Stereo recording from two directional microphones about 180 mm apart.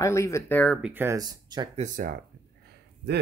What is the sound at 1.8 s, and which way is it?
Speech, 45° right (ahead or behind).